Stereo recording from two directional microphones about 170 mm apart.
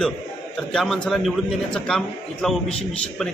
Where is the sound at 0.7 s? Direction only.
Centre (ahead or behind).